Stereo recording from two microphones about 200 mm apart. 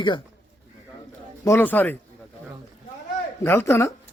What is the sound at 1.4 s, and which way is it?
Speech, 10° left (ahead or behind).